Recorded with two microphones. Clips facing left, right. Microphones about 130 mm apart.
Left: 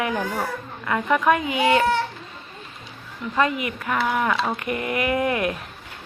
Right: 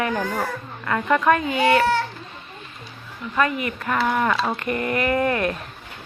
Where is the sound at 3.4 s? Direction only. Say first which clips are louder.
Even; 20° left (ahead or behind).